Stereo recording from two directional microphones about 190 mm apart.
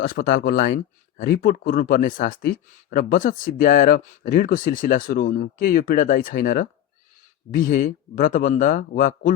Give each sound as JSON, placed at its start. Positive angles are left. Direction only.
{"t": 0.0, "sound": "speech", "side_deg": 50}